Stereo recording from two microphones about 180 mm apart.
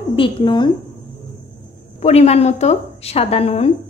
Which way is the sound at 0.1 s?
25° left (ahead or behind).